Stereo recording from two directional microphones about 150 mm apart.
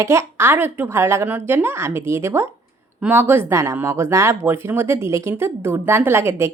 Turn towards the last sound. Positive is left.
turn(degrees=-15)  # may be behind; listen again after turning